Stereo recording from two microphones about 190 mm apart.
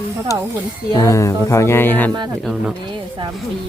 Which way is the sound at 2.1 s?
20° right (ahead or behind).